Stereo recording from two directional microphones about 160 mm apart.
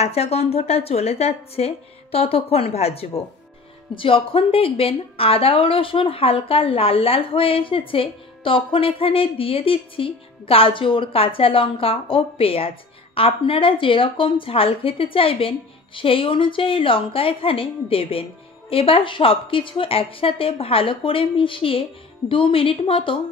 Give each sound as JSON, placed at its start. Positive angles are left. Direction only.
{"t": 0.0, "sound": "a woman's voice", "side_deg": 40}